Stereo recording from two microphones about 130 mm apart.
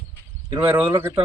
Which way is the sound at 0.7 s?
15° right (ahead or behind).